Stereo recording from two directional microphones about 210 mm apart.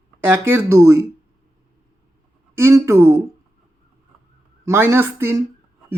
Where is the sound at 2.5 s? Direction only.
15° right (ahead or behind).